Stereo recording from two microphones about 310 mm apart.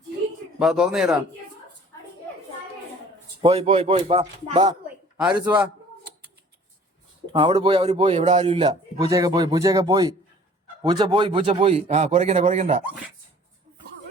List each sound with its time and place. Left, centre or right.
0.6 s a man's voice: centre
3.4 s a man's voice: centre
5.3 s a man's voice: centre
7.3 s a man's voice: centre